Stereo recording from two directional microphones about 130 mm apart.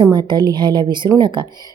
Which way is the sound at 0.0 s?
35° right (ahead or behind).